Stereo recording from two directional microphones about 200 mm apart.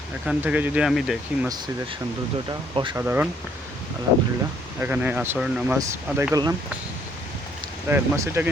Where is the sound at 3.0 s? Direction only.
10° right (ahead or behind).